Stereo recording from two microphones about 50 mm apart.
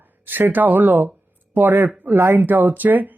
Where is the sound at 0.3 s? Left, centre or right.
Right.